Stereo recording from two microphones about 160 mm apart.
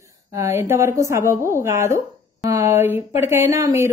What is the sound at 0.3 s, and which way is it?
A woman's voice, 15° right (ahead or behind).